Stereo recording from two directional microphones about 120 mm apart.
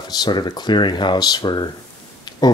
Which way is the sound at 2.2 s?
35° left (ahead or behind).